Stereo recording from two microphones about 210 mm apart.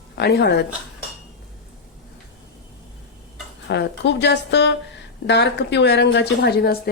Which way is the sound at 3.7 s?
55° left (ahead or behind).